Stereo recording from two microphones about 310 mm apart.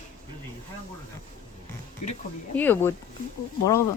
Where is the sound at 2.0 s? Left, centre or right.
Left.